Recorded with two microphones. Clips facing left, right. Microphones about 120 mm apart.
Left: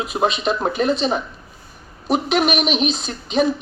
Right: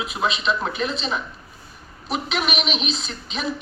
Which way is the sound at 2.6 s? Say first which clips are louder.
Left 6 dB; 50° left (ahead or behind).